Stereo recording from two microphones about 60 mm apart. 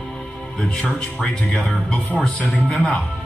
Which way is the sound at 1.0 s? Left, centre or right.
Centre.